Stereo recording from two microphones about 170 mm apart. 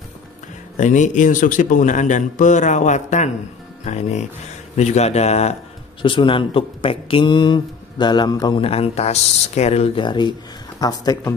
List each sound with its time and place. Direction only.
0.7 s a man's voice: 45° left (ahead or behind); by 11.3 s 20° left (ahead or behind)